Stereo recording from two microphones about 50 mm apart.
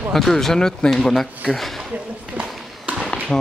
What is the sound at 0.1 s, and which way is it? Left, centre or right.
Speech, centre.